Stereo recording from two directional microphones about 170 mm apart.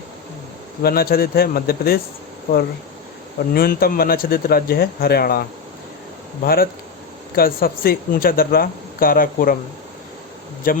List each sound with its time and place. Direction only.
0.8 s speech: 65° left (ahead or behind)
3.5 s speech: 60° left (ahead or behind)
10.7 s speech: 55° left (ahead or behind)